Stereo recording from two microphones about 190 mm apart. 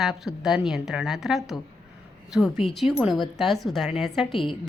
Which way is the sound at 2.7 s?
Centre (ahead or behind).